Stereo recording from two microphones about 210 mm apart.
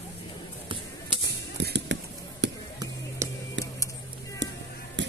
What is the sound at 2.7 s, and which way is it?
Music, 15° right (ahead or behind).